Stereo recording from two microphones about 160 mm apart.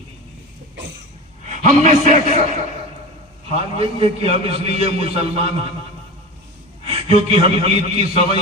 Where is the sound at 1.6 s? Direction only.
50° right (ahead or behind).